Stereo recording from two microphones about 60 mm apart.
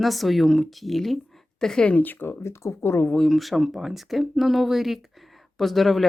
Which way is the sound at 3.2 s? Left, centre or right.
Centre.